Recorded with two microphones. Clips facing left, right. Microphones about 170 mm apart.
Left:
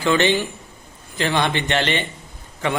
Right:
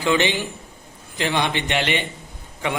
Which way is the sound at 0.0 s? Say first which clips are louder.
Left 2 dB; 15° right (ahead or behind).